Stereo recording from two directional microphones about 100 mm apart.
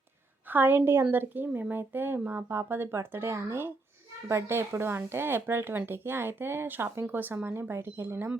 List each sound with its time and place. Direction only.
0.5 s speech: 20° right (ahead or behind)